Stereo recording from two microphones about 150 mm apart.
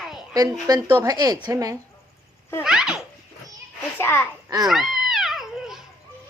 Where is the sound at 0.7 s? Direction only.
25° right (ahead or behind).